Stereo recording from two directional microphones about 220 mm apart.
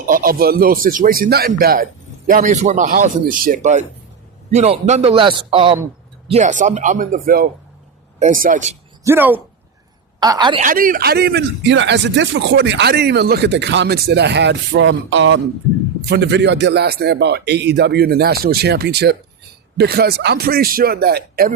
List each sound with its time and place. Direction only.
0.1 s a man's voice: 40° right (ahead or behind)
9.0 s a woman's voice: 10° right (ahead or behind)
10.6 s a man's voice: 40° right (ahead or behind)